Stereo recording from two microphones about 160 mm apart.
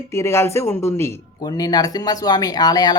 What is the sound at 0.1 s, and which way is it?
Speech, 15° left (ahead or behind).